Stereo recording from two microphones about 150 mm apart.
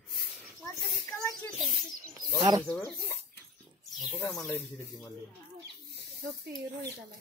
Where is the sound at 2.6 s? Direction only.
15° left (ahead or behind).